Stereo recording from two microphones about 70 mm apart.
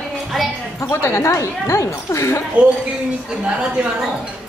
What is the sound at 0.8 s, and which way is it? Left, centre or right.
Speech, left.